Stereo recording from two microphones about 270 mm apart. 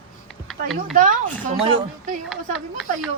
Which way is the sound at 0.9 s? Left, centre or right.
Right.